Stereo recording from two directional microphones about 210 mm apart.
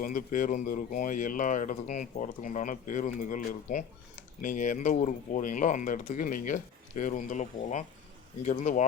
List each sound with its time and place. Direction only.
0.0 s speech: 40° left (ahead or behind)